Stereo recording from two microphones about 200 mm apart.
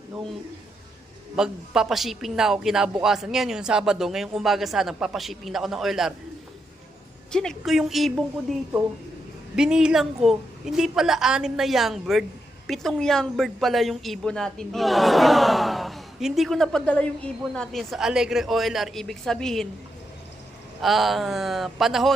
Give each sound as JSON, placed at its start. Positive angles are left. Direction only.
{"t": 1.4, "sound": "speech", "side_deg": -5}
{"t": 7.3, "sound": "speech", "side_deg": 5}
{"t": 9.6, "sound": "speech", "side_deg": -5}
{"t": 20.8, "sound": "speech", "side_deg": 0}